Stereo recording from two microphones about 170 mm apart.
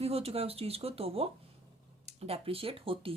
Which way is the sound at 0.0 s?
35° right (ahead or behind).